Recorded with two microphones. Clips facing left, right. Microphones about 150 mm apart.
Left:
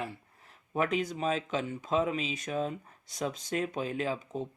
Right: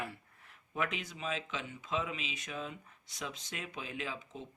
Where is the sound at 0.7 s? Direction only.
40° left (ahead or behind).